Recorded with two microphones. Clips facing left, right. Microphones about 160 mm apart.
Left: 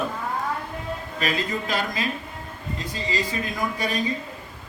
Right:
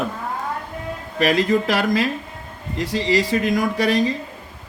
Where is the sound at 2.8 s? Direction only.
80° right.